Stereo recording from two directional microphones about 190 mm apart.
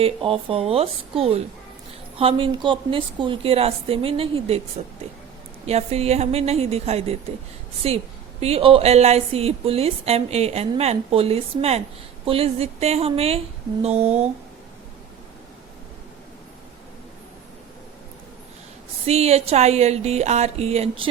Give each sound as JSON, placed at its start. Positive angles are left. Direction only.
{"t": 0.0, "sound": "a woman's voice", "side_deg": -30}
{"t": 5.6, "sound": "a woman's voice", "side_deg": -35}
{"t": 19.0, "sound": "a woman's voice", "side_deg": -35}